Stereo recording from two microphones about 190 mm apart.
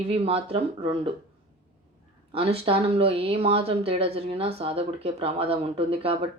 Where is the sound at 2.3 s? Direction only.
30° right (ahead or behind).